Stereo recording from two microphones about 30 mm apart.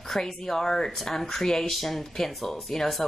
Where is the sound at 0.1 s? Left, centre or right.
Centre.